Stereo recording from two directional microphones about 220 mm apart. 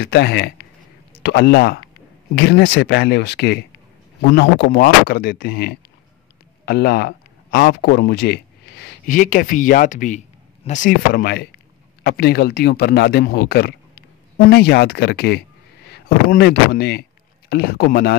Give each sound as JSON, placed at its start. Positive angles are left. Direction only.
{"t": 0.0, "sound": "a man's voice", "side_deg": 50}